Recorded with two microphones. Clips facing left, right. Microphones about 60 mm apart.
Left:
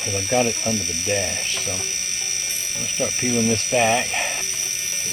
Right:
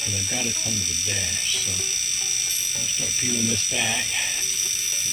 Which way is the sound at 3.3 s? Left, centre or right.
Left.